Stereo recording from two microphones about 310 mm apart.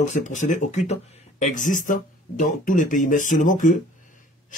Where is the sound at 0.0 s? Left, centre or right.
Left.